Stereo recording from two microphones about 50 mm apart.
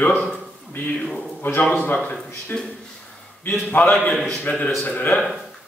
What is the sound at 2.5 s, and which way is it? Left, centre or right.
A man's voice, left.